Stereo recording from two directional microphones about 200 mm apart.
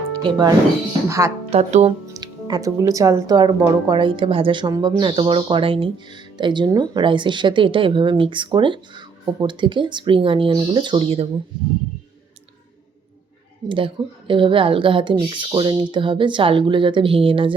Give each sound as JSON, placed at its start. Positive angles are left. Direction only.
{"t": 0.2, "sound": "a woman's voice", "side_deg": -20}
{"t": 1.5, "sound": "speech", "side_deg": -30}
{"t": 2.0, "sound": "speech", "side_deg": -20}
{"t": 13.7, "sound": "speech", "side_deg": -25}